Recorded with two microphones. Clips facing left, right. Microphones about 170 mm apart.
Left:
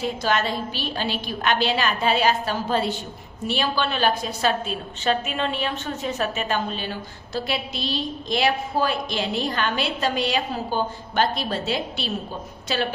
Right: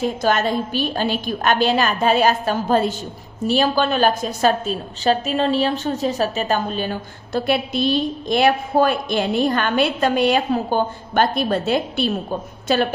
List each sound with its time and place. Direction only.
0.0 s a woman's voice: 45° right (ahead or behind)
7.3 s a woman's voice: 55° right (ahead or behind)